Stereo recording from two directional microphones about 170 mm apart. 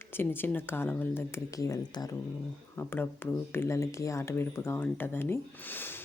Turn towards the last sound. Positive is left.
turn(degrees=10)  # may be behind; listen again after turning